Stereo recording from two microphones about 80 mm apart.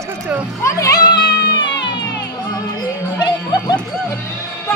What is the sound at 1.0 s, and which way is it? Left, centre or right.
Cat, left.